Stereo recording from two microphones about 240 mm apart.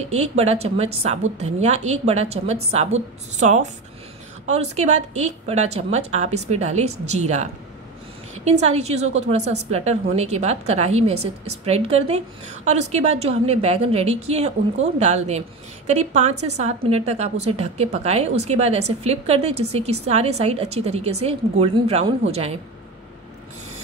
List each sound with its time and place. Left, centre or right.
0.1 s a woman's voice: right
8.5 s a woman's voice: right